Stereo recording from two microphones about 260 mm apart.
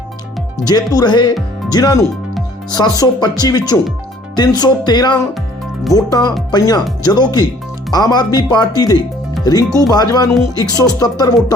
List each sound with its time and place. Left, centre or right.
0.6 s speech: centre